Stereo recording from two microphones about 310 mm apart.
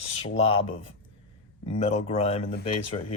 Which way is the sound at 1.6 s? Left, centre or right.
Left.